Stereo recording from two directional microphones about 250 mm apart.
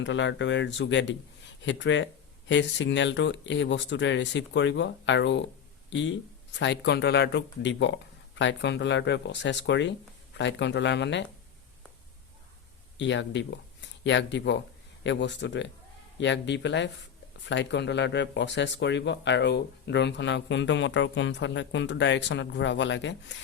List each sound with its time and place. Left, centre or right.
0.0 s speech: left
13.0 s speech: left